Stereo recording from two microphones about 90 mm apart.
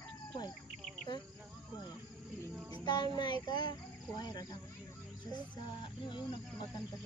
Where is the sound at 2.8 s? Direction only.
50° left (ahead or behind).